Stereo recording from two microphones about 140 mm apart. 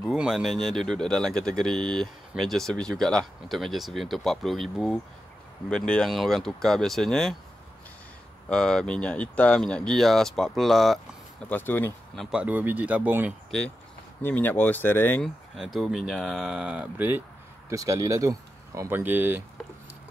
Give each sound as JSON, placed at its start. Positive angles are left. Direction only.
{"t": 0.0, "sound": "speech", "side_deg": -5}
{"t": 8.5, "sound": "speech", "side_deg": 5}
{"t": 11.4, "sound": "speech", "side_deg": 15}
{"t": 12.2, "sound": "speech", "side_deg": -5}
{"t": 14.2, "sound": "speech", "side_deg": 15}
{"t": 15.2, "sound": "speech", "side_deg": 0}
{"t": 17.6, "sound": "speech", "side_deg": -25}